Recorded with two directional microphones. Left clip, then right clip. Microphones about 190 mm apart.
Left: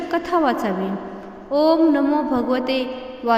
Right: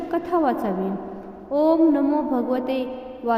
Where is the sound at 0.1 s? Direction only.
15° left (ahead or behind).